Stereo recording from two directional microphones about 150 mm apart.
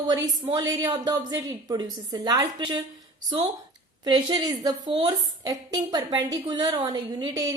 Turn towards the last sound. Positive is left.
turn(degrees=-25)  # may be behind; listen again after turning